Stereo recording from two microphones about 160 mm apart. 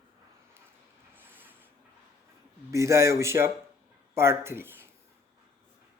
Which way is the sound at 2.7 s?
20° right (ahead or behind).